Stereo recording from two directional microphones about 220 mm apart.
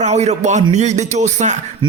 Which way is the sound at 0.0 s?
30° right (ahead or behind).